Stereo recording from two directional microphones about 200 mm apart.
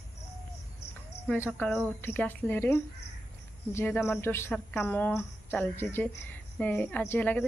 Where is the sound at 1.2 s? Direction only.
5° left (ahead or behind).